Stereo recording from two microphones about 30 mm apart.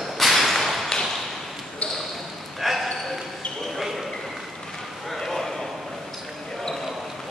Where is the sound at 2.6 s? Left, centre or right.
Centre.